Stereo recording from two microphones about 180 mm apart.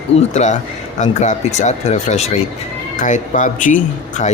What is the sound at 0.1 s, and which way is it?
Speech, 35° left (ahead or behind).